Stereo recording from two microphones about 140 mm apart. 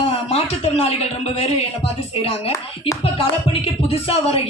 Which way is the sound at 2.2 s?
40° left (ahead or behind).